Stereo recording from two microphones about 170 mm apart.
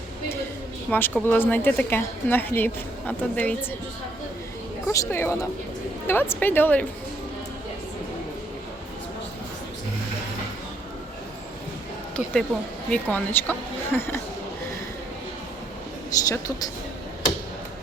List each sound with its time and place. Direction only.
0.9 s a woman's voice: 10° left (ahead or behind)
4.9 s a woman's voice: 15° left (ahead or behind)
12.1 s a woman's voice: 5° left (ahead or behind)